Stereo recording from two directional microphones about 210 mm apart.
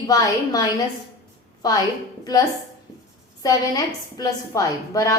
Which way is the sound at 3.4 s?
15° left (ahead or behind).